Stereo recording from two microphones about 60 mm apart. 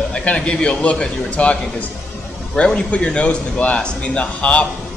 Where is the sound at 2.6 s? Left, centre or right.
Centre.